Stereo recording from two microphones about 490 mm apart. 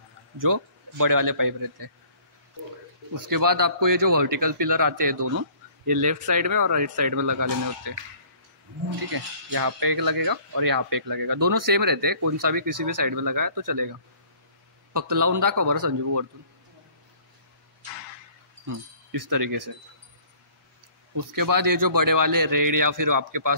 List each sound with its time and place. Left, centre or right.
0.4 s speech: right
3.2 s speech: right
9.1 s speech: right
18.7 s speech: right
21.1 s speech: right